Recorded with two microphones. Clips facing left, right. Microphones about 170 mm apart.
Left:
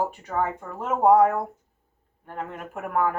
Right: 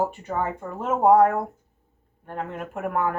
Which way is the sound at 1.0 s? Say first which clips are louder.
Right 1 dB; centre (ahead or behind).